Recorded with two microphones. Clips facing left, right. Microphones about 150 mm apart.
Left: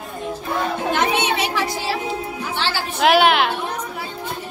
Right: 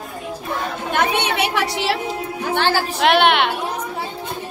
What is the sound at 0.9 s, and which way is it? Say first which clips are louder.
A woman's voice: right 3 dB; 60° right (ahead or behind).